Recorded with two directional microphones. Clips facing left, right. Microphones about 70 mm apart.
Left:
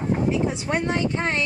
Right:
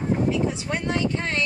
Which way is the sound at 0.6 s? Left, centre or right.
Left.